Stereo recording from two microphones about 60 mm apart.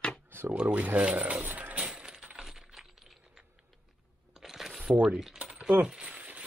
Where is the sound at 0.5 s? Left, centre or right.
Right.